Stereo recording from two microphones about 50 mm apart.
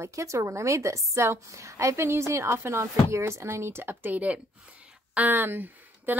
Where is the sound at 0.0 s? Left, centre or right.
Right.